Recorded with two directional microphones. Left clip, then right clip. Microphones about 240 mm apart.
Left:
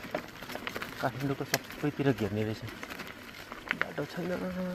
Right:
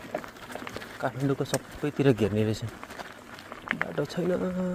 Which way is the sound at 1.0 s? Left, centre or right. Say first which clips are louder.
Right 5 dB; right.